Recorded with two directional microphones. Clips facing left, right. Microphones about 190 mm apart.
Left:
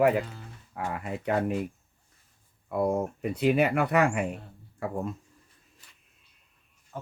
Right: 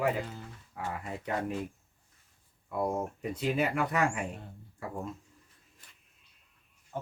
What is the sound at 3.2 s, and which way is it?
Speech, 65° left (ahead or behind).